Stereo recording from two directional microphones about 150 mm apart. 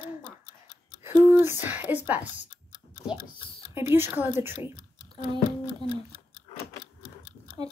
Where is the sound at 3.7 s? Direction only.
15° right (ahead or behind).